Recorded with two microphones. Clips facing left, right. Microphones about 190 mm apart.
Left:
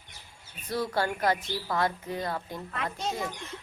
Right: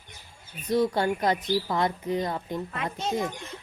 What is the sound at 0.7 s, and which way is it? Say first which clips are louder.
Speech: right 5 dB; 20° right (ahead or behind).